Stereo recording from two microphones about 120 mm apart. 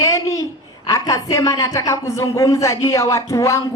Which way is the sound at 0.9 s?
30° left (ahead or behind).